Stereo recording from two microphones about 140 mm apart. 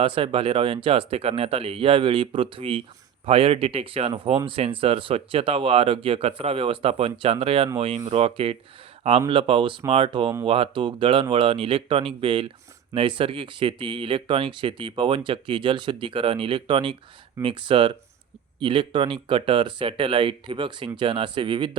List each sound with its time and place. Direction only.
0.0 s speech: 40° right (ahead or behind)